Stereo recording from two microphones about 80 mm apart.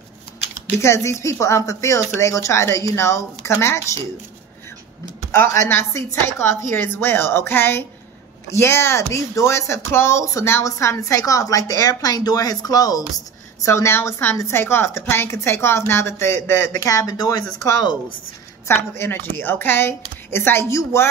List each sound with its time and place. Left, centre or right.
0.7 s speech: left
5.3 s speech: left
13.7 s speech: left
18.7 s speech: left